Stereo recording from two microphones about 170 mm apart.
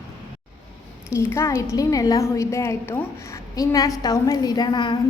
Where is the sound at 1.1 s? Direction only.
15° left (ahead or behind).